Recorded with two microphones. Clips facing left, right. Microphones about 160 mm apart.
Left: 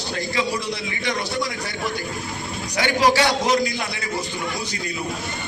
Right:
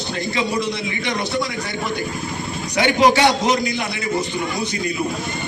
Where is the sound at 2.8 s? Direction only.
20° right (ahead or behind).